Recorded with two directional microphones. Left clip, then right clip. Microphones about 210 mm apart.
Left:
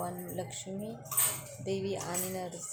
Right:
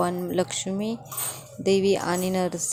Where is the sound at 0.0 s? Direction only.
35° right (ahead or behind).